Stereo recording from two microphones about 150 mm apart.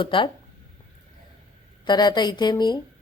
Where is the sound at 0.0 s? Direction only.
35° left (ahead or behind).